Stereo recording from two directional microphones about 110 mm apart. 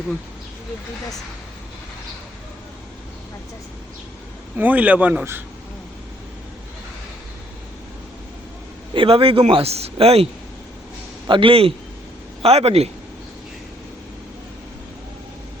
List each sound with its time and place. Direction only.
4.5 s speech: 15° right (ahead or behind)
8.9 s a man's voice: 55° right (ahead or behind)
11.3 s a man's voice: 55° right (ahead or behind)
12.4 s speech: 65° right (ahead or behind)